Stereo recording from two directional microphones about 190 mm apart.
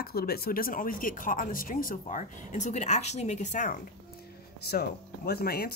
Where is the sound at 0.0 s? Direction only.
55° left (ahead or behind).